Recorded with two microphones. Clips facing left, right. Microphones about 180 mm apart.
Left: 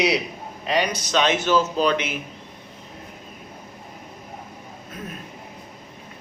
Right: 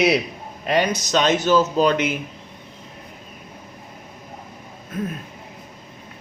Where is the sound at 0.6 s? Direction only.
50° right (ahead or behind).